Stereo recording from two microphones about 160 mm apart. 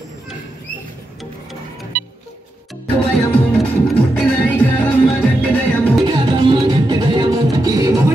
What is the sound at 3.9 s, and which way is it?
Music, 5° left (ahead or behind).